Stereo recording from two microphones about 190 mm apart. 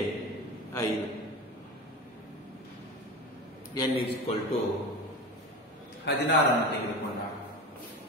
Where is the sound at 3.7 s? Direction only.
20° left (ahead or behind).